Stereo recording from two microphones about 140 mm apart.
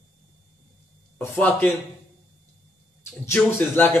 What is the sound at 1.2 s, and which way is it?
Speech, 10° left (ahead or behind).